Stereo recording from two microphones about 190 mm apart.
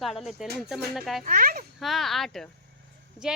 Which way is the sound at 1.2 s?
50° right (ahead or behind).